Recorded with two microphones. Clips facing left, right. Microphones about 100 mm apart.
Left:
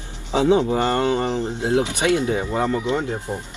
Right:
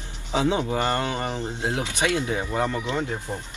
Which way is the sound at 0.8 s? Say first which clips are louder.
Left 5 dB; 25° left (ahead or behind).